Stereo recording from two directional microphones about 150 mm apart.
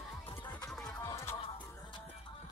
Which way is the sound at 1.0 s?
20° left (ahead or behind).